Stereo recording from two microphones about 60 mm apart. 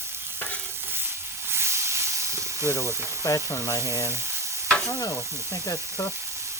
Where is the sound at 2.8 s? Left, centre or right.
Right.